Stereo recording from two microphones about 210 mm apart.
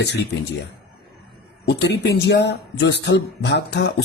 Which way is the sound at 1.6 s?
55° left (ahead or behind).